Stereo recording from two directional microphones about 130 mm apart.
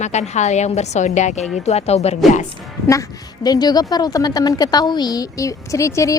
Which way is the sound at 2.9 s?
30° left (ahead or behind).